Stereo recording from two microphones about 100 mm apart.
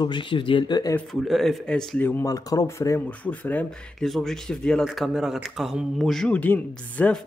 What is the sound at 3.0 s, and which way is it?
Speech, 15° left (ahead or behind).